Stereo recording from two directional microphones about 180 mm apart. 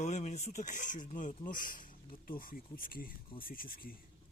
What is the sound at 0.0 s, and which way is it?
Speech, 40° left (ahead or behind).